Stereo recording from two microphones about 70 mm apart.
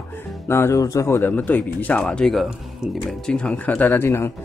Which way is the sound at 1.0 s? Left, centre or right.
Left.